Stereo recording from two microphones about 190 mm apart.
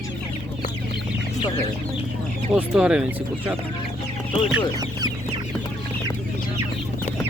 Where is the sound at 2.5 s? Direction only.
5° right (ahead or behind).